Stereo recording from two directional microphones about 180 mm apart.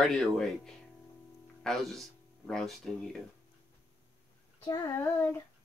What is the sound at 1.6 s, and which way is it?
Speech, centre (ahead or behind).